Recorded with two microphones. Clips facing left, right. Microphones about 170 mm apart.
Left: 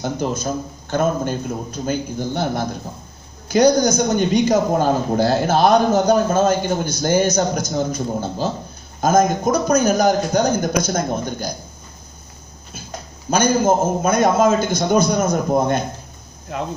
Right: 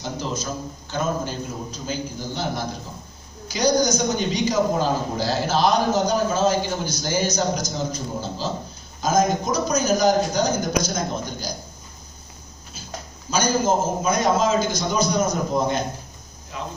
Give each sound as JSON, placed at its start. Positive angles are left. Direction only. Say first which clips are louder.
{"t": 0.0, "sound": "a man's voice", "louder": "left 6 dB", "side_deg": 55}
{"t": 13.3, "sound": "a man's voice", "louder": "left 5 dB", "side_deg": 55}